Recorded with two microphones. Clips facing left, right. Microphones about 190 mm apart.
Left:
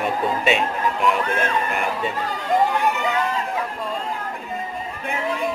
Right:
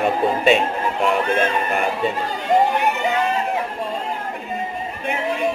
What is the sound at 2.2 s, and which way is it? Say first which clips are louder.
Run: right 1 dB; 25° right (ahead or behind).